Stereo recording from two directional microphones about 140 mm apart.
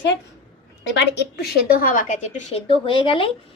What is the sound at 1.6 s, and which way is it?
A woman's voice, 90° left.